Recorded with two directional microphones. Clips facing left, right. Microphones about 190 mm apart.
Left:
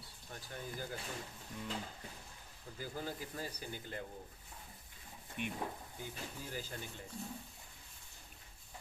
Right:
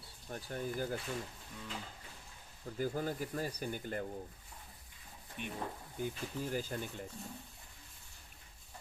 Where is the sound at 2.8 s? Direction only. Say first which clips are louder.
Right 7 dB; 50° right (ahead or behind).